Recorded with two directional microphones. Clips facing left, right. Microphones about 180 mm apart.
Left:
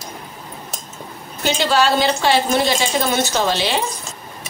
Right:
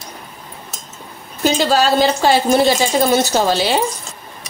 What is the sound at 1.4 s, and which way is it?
A woman's voice, 40° right (ahead or behind).